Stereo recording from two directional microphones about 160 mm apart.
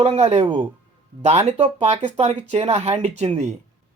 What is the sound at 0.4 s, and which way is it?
Speech, 30° right (ahead or behind).